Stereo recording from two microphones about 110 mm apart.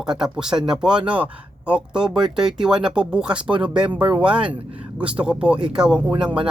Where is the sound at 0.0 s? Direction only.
5° right (ahead or behind).